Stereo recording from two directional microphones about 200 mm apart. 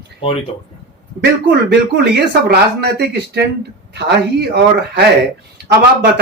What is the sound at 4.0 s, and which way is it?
Speech, 55° right (ahead or behind).